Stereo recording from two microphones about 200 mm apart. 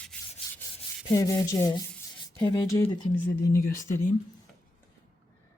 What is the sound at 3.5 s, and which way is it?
Speech, 45° left (ahead or behind).